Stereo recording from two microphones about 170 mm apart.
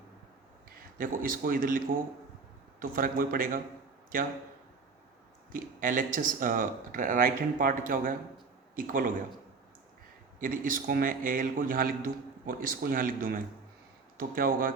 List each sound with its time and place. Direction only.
0.9 s a man's voice: 55° right (ahead or behind)
2.8 s a man's voice: 60° right (ahead or behind)
5.5 s a man's voice: 55° right (ahead or behind)
10.4 s a man's voice: 55° right (ahead or behind)